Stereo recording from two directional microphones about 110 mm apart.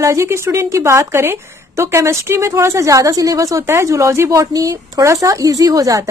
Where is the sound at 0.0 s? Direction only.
25° right (ahead or behind).